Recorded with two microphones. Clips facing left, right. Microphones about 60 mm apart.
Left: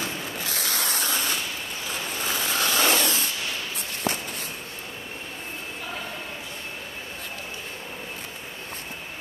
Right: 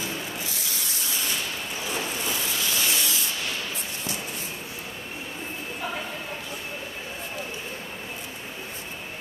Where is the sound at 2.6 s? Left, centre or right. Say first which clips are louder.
Left 8 dB; left.